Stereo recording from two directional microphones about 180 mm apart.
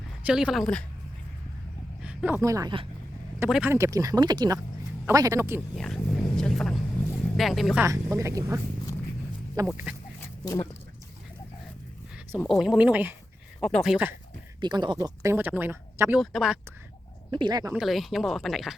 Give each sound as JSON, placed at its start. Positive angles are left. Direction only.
{"t": 0.2, "sound": "speech", "side_deg": -5}
{"t": 2.0, "sound": "speech", "side_deg": -10}
{"t": 5.7, "sound": "speech", "side_deg": 0}
{"t": 7.9, "sound": "speech", "side_deg": -15}
{"t": 10.2, "sound": "duck", "side_deg": 15}
{"t": 12.4, "sound": "speech", "side_deg": 0}
{"t": 13.6, "sound": "speech", "side_deg": 5}
{"t": 14.6, "sound": "speech", "side_deg": -25}
{"t": 16.1, "sound": "speech", "side_deg": 0}
{"t": 17.3, "sound": "speech", "side_deg": -25}
{"t": 17.7, "sound": "speech", "side_deg": 0}